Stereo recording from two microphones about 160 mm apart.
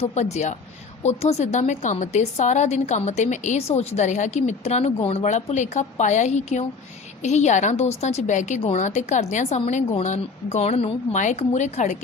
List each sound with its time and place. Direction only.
0.0 s a woman's voice: 45° left (ahead or behind)